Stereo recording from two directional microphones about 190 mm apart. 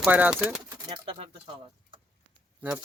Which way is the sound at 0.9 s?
30° right (ahead or behind).